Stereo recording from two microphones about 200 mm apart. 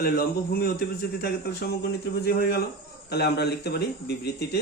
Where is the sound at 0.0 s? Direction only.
50° left (ahead or behind).